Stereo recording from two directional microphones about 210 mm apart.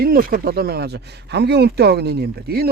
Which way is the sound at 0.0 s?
45° right (ahead or behind).